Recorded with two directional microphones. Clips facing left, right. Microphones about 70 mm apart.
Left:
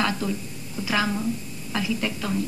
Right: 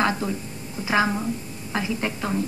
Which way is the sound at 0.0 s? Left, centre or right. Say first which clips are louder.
Right 2 dB; right.